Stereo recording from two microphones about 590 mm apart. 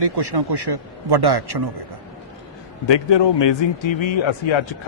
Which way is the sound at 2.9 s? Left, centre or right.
Left.